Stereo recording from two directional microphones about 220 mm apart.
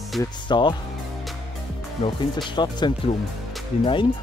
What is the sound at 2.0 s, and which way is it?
Speech, 20° left (ahead or behind).